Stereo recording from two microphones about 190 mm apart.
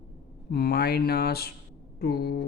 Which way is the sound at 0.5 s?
55° left (ahead or behind).